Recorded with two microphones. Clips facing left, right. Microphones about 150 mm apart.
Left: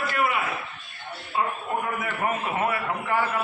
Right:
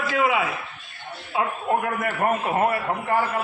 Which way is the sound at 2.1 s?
40° right (ahead or behind).